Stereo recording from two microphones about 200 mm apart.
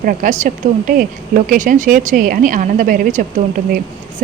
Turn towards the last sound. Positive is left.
turn(degrees=-40)  # may be behind; listen again after turning